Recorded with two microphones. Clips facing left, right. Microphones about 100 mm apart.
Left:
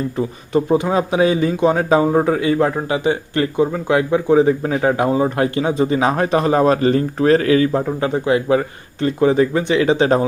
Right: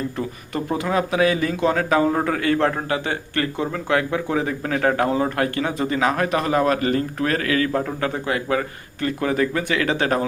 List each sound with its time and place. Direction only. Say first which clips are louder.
0.2 s speech: left 8 dB; 20° left (ahead or behind)